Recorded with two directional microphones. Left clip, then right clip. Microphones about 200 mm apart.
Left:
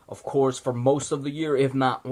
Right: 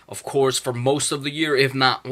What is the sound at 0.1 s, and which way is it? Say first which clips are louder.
Speech: right 3 dB; 15° right (ahead or behind).